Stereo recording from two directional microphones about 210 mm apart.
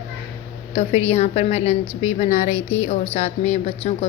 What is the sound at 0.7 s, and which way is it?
A woman's voice, 30° left (ahead or behind).